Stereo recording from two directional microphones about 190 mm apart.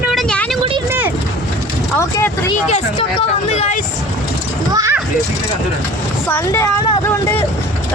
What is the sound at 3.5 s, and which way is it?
Speech, 35° left (ahead or behind).